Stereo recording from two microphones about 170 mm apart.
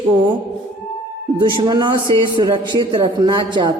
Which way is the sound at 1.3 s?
25° right (ahead or behind).